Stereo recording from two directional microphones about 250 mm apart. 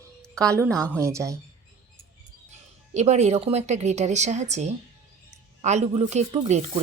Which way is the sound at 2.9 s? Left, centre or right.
Right.